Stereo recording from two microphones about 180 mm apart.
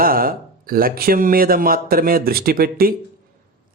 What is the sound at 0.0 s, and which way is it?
Speech, 55° right (ahead or behind).